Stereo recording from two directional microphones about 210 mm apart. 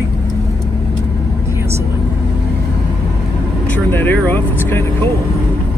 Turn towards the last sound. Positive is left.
turn(degrees=10)  # may be behind; listen again after turning